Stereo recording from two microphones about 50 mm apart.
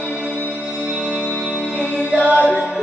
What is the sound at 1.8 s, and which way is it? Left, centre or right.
Music, left.